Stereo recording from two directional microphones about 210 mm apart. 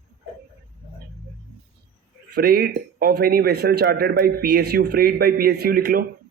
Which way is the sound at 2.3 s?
50° right (ahead or behind).